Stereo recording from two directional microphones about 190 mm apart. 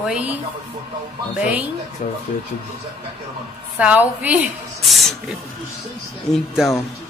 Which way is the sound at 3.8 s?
5° right (ahead or behind).